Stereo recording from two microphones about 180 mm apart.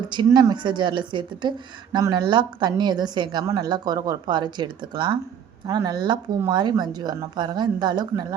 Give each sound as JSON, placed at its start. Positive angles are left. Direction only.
{"t": 0.1, "sound": "speech", "side_deg": -25}